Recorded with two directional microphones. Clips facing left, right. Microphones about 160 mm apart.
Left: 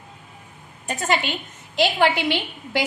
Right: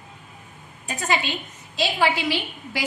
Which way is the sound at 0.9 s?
50° left (ahead or behind).